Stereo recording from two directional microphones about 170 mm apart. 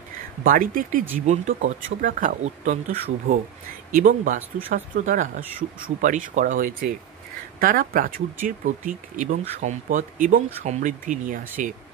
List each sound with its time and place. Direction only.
0.4 s speech: 55° right (ahead or behind)
1.2 s speech: 45° right (ahead or behind)